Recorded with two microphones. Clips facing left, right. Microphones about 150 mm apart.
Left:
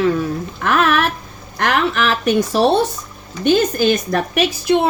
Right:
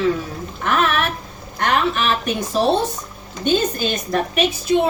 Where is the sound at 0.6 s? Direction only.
65° left (ahead or behind).